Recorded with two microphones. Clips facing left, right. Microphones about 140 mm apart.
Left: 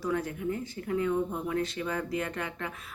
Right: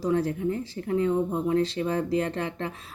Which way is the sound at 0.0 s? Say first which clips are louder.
Right 6 dB; 30° right (ahead or behind).